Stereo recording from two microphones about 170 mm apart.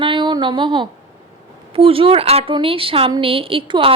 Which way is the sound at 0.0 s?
25° right (ahead or behind).